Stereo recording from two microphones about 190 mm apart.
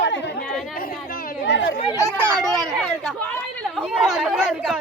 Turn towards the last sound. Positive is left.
turn(degrees=-5)  # may be behind; listen again after turning